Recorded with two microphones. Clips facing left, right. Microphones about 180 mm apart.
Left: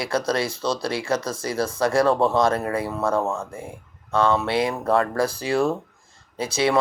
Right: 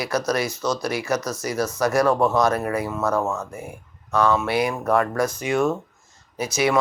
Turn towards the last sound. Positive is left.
turn(degrees=30)  # may be behind; listen again after turning